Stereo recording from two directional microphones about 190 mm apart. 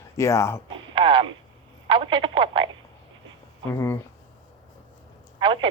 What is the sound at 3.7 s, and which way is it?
Speech, 10° left (ahead or behind).